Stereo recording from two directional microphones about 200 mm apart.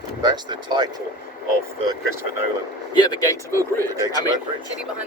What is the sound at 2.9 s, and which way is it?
Speech, 20° left (ahead or behind).